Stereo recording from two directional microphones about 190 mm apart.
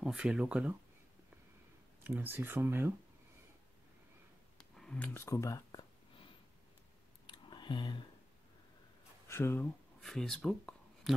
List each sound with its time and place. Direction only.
0.0 s speech: 5° right (ahead or behind)
2.0 s speech: 10° right (ahead or behind)
4.6 s a sound: 5° left (ahead or behind); by 8.0 s 25° left (ahead or behind)
9.3 s speech: 10° left (ahead or behind)